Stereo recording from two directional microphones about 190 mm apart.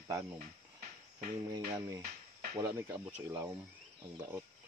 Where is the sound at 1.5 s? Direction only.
15° right (ahead or behind).